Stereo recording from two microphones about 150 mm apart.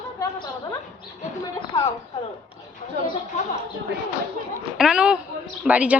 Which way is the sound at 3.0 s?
90° right.